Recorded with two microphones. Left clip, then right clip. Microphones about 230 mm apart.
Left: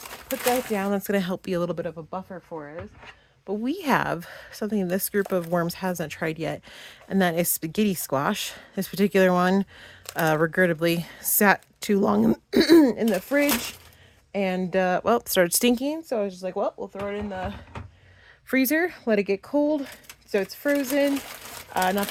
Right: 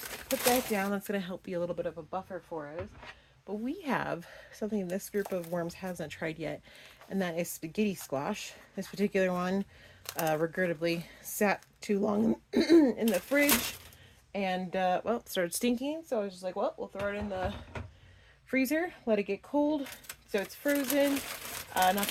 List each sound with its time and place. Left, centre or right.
0.3 s speech: centre
0.7 s speech: left
18.4 s speech: left